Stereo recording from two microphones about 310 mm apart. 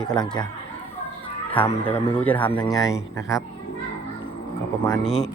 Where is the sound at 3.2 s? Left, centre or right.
Centre.